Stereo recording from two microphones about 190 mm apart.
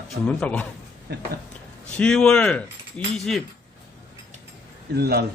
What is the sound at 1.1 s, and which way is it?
Speech, 60° right (ahead or behind).